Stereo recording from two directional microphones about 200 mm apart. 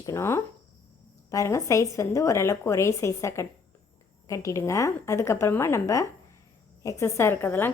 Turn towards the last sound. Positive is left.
turn(degrees=10)  # may be behind; listen again after turning